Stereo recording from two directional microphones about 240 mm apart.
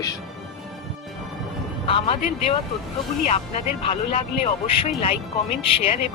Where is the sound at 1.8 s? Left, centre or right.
Left.